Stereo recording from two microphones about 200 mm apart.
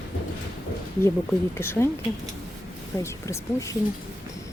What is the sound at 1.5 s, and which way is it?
Speech, 10° left (ahead or behind).